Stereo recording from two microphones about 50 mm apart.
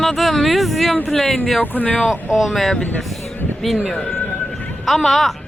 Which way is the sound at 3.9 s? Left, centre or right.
Centre.